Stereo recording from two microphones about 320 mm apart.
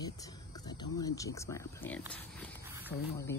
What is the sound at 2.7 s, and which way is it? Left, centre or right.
Wild animals, centre.